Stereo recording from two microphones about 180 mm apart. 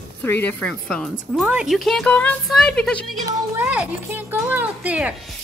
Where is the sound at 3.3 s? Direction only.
10° right (ahead or behind).